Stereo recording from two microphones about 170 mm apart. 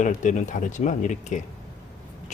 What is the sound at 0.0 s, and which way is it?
Speech, 45° left (ahead or behind).